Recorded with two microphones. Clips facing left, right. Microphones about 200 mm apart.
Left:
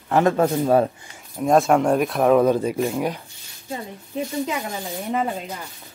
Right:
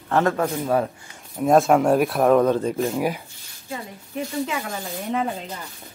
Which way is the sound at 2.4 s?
10° left (ahead or behind).